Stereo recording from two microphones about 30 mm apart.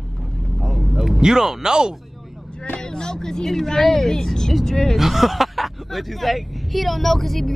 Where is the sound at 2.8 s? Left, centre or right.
Left.